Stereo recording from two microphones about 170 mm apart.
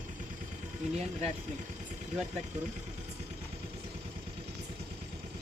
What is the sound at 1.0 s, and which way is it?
Speech, 40° right (ahead or behind).